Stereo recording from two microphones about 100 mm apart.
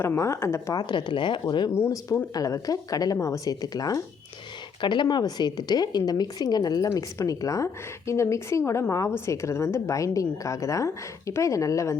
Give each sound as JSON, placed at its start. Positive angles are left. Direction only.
{"t": 0.0, "sound": "speech", "side_deg": 25}
{"t": 0.8, "sound": "speech", "side_deg": 50}
{"t": 1.7, "sound": "a woman's voice", "side_deg": 30}
{"t": 4.8, "sound": "a woman's voice", "side_deg": 50}